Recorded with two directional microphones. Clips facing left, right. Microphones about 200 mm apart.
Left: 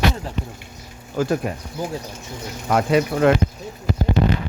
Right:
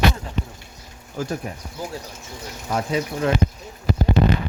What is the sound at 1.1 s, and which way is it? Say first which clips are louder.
Speech: left 6 dB; 90° left.